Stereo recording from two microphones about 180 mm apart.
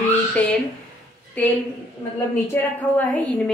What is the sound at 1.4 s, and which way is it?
Speech, 10° left (ahead or behind).